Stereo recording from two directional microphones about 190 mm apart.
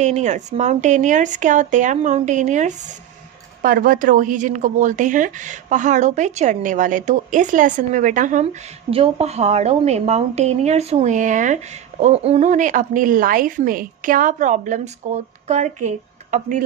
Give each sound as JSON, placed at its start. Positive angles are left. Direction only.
{"t": 0.0, "sound": "a woman's voice", "side_deg": -40}
{"t": 8.9, "sound": "a woman's voice", "side_deg": -30}